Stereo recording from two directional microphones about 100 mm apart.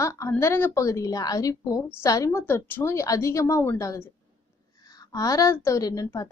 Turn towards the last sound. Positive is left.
turn(degrees=35)  # may be behind; listen again after turning